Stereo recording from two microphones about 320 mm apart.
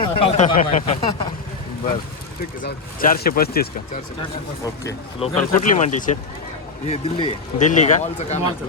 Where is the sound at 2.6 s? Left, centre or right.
Left.